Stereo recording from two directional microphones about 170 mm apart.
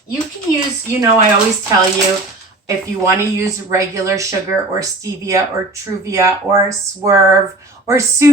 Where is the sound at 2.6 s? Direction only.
15° right (ahead or behind).